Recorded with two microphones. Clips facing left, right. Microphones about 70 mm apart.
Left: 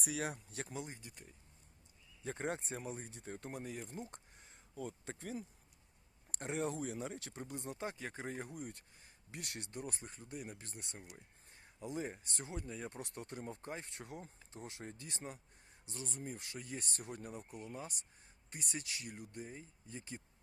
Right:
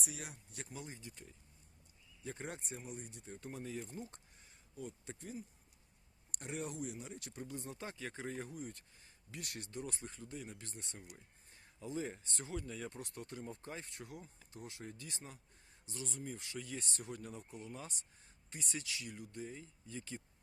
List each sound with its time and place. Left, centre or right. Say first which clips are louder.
0.0 s speech: left 8 dB; left
0.8 s speech: left 3 dB; left
2.2 s speech: left 5 dB; left
3.5 s speech: right 3 dB; left
4.7 s speech: left 3 dB; left
6.4 s speech: left 4 dB; left
7.4 s speech: left 3 dB; left